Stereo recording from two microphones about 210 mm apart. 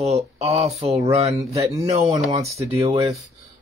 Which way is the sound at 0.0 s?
30° right (ahead or behind).